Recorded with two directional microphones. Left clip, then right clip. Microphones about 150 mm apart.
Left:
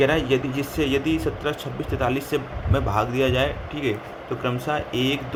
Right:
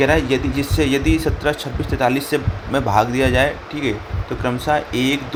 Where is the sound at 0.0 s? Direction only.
15° right (ahead or behind).